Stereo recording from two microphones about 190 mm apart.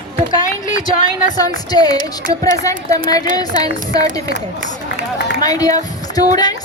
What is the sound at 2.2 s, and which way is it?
Speech, 45° right (ahead or behind).